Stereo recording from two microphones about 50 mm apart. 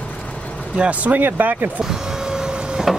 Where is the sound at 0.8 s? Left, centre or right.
Right.